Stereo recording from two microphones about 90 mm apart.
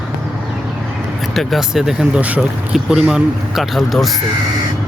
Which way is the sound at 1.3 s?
Centre (ahead or behind).